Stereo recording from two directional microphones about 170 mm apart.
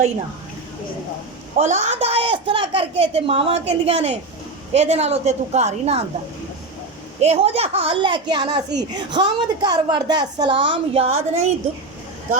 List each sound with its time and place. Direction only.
1.5 s a woman's voice: 40° right (ahead or behind)
7.2 s a woman's voice: 40° right (ahead or behind)